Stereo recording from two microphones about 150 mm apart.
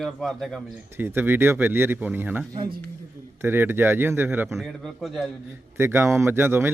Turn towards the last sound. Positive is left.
turn(degrees=-15)  # may be behind; listen again after turning